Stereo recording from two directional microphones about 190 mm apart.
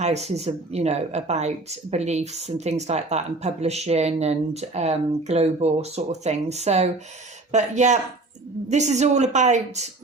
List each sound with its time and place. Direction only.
0.0 s speech: 35° right (ahead or behind)